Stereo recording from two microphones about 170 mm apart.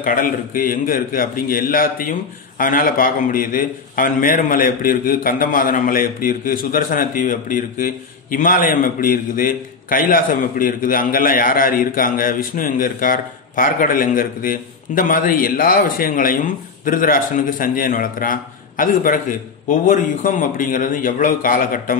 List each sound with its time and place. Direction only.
0.0 s a man's voice: 55° left (ahead or behind)